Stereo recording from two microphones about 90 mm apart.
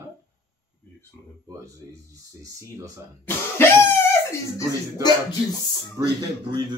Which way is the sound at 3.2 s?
25° left (ahead or behind).